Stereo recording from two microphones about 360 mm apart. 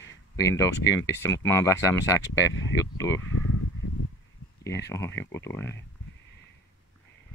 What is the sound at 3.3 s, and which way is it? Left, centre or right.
Speech, left.